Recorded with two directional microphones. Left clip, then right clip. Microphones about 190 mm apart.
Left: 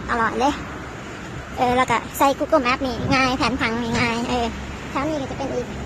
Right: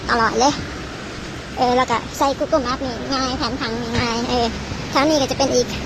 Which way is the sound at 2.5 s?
30° left (ahead or behind).